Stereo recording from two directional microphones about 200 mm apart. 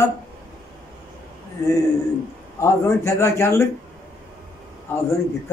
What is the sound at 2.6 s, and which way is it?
A man's voice, 15° left (ahead or behind).